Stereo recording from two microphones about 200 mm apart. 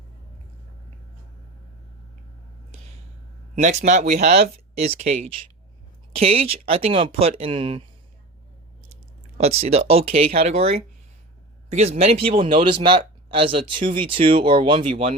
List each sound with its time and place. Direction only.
3.5 s speech: 35° right (ahead or behind)
9.4 s speech: 30° right (ahead or behind)